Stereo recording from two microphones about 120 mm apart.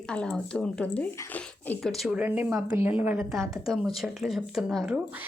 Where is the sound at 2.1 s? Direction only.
15° right (ahead or behind).